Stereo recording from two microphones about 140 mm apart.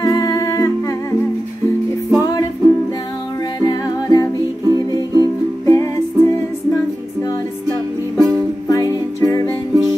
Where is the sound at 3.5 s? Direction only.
25° left (ahead or behind).